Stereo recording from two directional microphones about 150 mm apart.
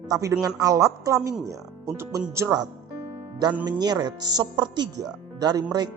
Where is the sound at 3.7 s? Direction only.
30° right (ahead or behind).